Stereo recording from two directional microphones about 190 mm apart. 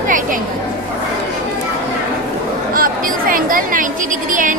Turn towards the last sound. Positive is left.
turn(degrees=-45)  # may be behind; listen again after turning